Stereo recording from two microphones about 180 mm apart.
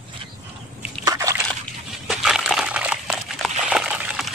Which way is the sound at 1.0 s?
20° right (ahead or behind).